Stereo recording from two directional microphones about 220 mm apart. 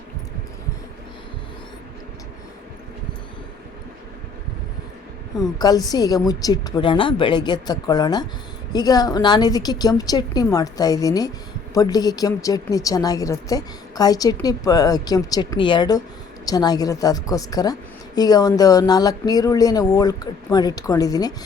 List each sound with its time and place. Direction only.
5.4 s a woman's voice: 15° left (ahead or behind)